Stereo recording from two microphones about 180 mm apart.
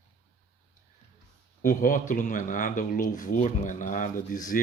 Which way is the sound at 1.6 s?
45° left (ahead or behind).